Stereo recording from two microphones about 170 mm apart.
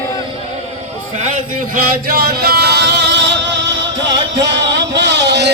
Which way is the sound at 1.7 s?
65° right (ahead or behind).